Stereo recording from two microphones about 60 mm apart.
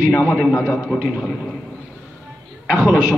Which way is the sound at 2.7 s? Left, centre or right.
Right.